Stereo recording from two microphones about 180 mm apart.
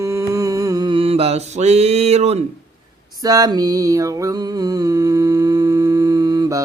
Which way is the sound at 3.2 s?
20° right (ahead or behind).